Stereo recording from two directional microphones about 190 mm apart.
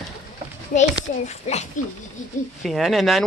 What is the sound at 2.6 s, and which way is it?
Speech, centre (ahead or behind).